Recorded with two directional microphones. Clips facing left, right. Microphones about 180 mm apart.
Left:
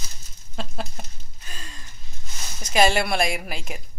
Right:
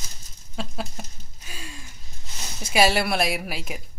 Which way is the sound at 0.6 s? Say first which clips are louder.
Right 1 dB; 5° right (ahead or behind).